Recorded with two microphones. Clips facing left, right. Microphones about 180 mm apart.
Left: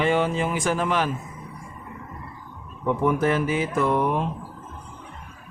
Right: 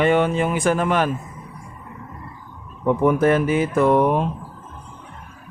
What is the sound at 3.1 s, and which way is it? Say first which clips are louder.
Mantra: right 5 dB; 50° right (ahead or behind).